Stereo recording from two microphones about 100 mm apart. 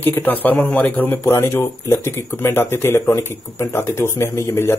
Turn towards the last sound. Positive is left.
turn(degrees=25)  # may be behind; listen again after turning